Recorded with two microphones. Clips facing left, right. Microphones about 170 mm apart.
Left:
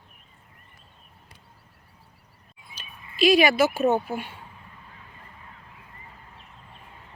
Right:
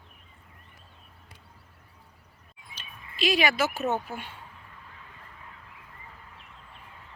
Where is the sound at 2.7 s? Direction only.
10° left (ahead or behind).